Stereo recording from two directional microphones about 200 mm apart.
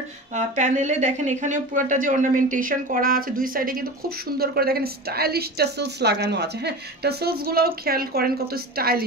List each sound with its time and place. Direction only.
0.6 s speech: 35° right (ahead or behind)